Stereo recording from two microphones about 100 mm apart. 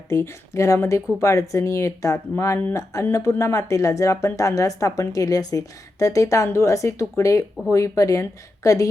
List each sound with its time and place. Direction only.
0.1 s speech: 30° left (ahead or behind)